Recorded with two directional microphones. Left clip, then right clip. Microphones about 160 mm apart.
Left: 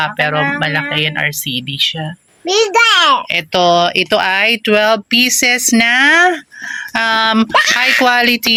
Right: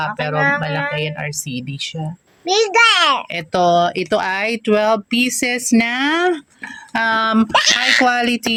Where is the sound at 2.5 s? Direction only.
55° left (ahead or behind); by 3.2 s 40° left (ahead or behind).